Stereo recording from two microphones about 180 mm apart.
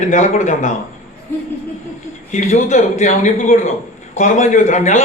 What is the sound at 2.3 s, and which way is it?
A man's voice, 40° left (ahead or behind).